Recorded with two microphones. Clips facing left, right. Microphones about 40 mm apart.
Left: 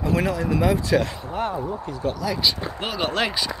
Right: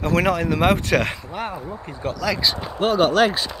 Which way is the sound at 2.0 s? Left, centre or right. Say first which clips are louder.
Right 2 dB; right.